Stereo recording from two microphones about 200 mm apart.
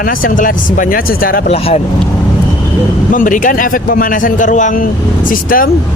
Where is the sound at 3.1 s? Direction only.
40° left (ahead or behind).